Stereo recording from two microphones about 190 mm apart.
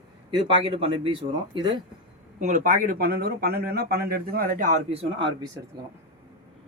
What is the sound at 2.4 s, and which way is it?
Speech, 40° right (ahead or behind).